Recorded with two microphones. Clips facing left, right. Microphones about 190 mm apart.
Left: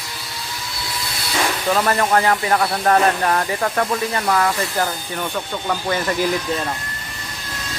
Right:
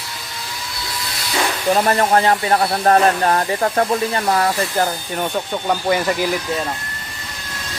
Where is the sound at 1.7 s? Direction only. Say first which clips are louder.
Right 3 dB; 30° right (ahead or behind).